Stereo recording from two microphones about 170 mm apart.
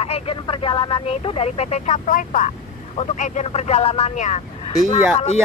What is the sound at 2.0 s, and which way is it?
Speech, 50° left (ahead or behind).